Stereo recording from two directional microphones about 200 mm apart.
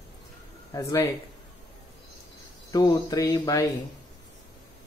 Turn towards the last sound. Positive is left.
turn(degrees=15)  # may be behind; listen again after turning